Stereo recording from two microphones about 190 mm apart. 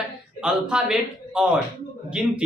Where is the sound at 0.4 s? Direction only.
5° right (ahead or behind).